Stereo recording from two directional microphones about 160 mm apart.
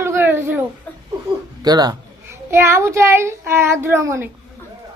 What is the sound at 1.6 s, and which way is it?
A child's voice, 25° right (ahead or behind).